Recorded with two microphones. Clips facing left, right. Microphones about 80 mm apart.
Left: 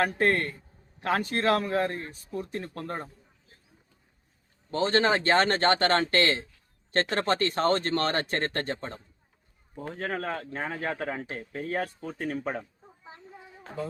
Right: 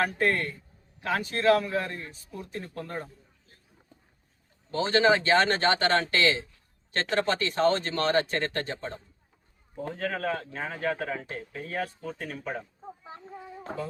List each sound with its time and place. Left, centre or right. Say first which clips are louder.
0.2 s speech: left 1 dB; left
4.7 s speech: right 1 dB; left
10.2 s speech: right 1 dB; left